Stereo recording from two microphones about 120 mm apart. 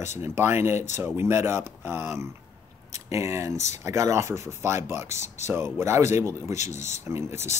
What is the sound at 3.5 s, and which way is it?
Speech, 75° left (ahead or behind).